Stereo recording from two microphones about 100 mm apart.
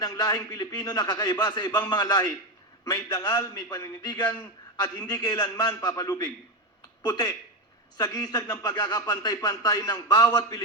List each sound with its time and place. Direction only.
0.0 s a man's voice: 35° left (ahead or behind)
7.9 s a man's voice: 35° left (ahead or behind)